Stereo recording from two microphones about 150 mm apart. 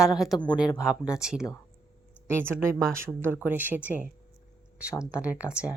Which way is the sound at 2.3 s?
15° right (ahead or behind).